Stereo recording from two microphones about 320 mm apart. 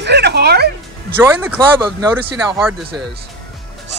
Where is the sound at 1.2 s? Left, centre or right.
Centre.